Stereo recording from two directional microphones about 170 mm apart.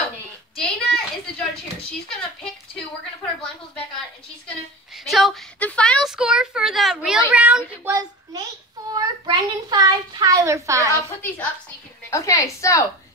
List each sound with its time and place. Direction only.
0.6 s a sound: 5° left (ahead or behind)
4.9 s a woman's voice: centre (ahead or behind); by 11.0 s 20° right (ahead or behind)
11.2 s a woman's voice: 10° left (ahead or behind)